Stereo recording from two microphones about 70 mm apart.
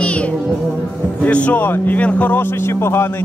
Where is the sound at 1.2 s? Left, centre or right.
Centre.